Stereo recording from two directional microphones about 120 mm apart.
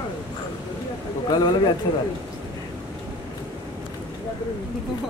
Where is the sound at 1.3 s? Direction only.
35° left (ahead or behind).